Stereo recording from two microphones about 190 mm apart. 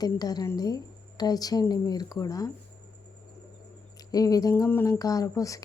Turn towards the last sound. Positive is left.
turn(degrees=15)  # may be behind; listen again after turning